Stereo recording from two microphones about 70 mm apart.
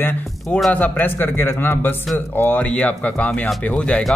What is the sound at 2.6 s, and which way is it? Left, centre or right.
Speech, centre.